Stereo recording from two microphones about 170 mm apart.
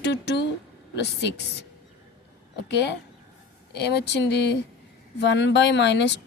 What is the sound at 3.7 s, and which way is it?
Speech, 80° left.